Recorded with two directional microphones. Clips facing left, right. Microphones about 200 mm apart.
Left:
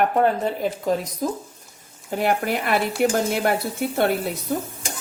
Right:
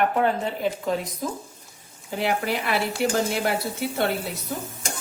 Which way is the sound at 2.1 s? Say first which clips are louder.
Left 3 dB; 50° left (ahead or behind).